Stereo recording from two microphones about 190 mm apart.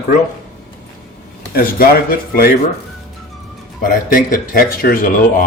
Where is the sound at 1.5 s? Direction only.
50° left (ahead or behind).